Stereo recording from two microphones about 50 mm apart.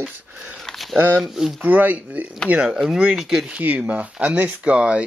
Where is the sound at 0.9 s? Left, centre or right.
Right.